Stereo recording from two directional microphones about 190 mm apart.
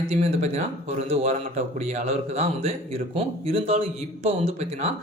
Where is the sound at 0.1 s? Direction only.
35° right (ahead or behind).